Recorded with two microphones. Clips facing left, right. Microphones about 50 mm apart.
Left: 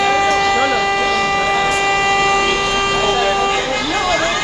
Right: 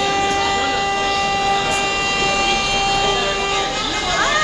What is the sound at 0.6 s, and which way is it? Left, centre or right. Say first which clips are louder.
Vehicle: left 4 dB; centre.